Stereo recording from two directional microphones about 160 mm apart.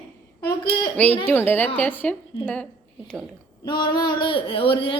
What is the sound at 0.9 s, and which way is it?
A woman's voice, 10° left (ahead or behind).